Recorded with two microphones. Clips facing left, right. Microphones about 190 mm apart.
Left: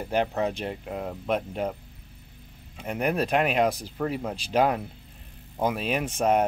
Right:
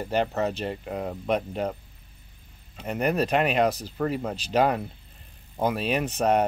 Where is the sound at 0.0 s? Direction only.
5° left (ahead or behind).